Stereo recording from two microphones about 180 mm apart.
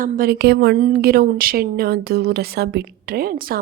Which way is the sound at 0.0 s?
55° right (ahead or behind).